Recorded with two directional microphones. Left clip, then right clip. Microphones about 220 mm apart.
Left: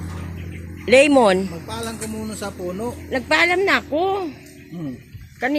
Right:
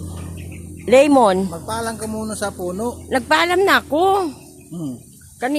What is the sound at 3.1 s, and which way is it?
Speech, 20° right (ahead or behind).